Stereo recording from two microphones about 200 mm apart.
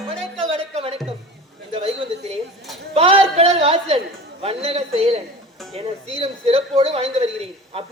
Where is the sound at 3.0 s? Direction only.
30° right (ahead or behind).